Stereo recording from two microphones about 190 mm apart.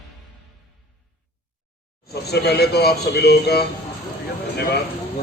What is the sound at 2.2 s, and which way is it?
Speech, 60° left (ahead or behind).